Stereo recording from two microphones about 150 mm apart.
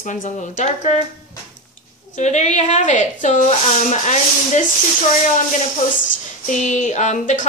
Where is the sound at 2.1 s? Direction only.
50° left (ahead or behind).